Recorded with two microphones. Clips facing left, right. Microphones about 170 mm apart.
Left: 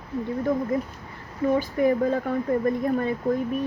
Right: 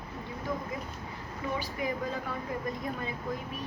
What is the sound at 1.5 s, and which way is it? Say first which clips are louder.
Speech: left 12 dB; 50° left (ahead or behind).